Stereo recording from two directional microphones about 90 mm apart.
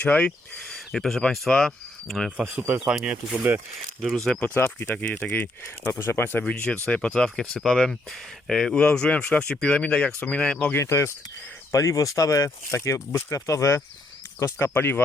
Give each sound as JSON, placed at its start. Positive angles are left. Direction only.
{"t": 0.0, "sound": "speech", "side_deg": 15}
{"t": 0.9, "sound": "speech", "side_deg": 5}
{"t": 2.4, "sound": "speech", "side_deg": -15}
{"t": 4.4, "sound": "speech", "side_deg": 15}
{"t": 5.0, "sound": "speech", "side_deg": 15}
{"t": 6.4, "sound": "speech", "side_deg": 10}
{"t": 10.8, "sound": "speech", "side_deg": 30}